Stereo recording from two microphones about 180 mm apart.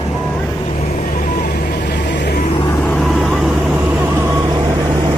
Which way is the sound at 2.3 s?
40° left (ahead or behind).